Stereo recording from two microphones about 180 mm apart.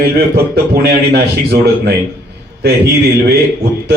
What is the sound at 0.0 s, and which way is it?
Speech, 60° right (ahead or behind).